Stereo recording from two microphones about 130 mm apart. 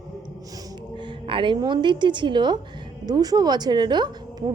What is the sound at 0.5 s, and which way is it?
A woman's voice, 35° right (ahead or behind).